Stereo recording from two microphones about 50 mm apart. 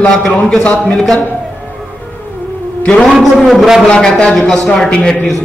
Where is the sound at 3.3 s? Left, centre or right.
Centre.